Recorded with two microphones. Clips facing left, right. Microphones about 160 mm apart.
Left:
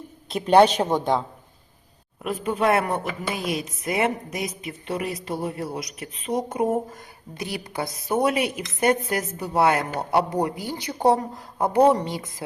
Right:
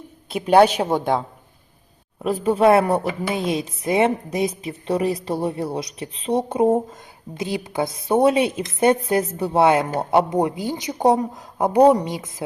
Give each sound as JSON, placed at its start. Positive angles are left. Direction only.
{"t": 0.3, "sound": "speech", "side_deg": -5}
{"t": 2.2, "sound": "a woman's voice", "side_deg": -35}